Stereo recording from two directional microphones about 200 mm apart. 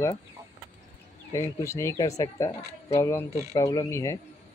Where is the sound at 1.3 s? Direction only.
15° left (ahead or behind).